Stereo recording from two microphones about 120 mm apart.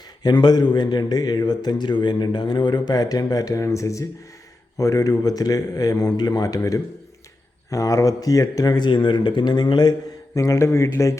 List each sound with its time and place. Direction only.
0.2 s speech: 35° left (ahead or behind)
10.3 s speech: 25° left (ahead or behind)